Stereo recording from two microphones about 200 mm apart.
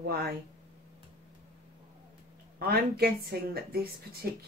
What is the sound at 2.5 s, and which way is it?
Speech, 50° right (ahead or behind).